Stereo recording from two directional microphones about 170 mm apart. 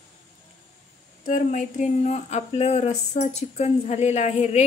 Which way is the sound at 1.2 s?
50° left (ahead or behind).